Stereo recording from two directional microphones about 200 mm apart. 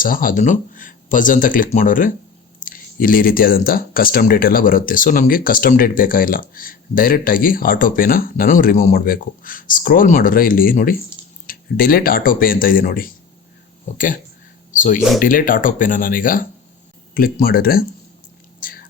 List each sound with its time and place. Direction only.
0.0 s speech: 45° left (ahead or behind)
18.6 s whispering: 45° left (ahead or behind)